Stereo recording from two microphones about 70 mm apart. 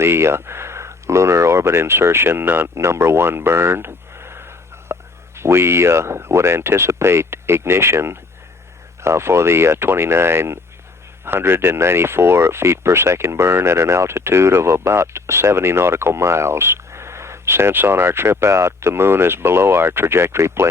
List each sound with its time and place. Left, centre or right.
0.0 s speech: right